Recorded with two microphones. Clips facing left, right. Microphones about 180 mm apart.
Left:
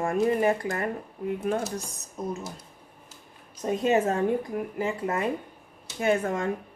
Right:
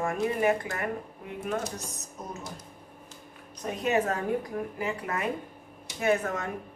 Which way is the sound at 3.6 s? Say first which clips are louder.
Left 4 dB; 25° left (ahead or behind).